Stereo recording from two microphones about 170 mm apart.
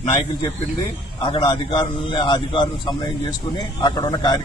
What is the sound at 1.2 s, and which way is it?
A man's voice, 30° left (ahead or behind).